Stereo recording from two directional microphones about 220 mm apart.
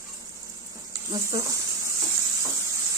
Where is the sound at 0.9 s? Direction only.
15° right (ahead or behind).